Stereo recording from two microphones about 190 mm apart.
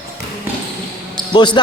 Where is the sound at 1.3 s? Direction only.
25° left (ahead or behind).